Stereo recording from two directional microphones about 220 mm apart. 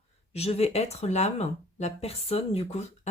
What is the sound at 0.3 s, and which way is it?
Speech, 30° left (ahead or behind).